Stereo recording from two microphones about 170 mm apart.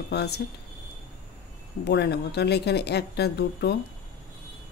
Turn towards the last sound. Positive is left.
turn(degrees=75)  # may be behind; listen again after turning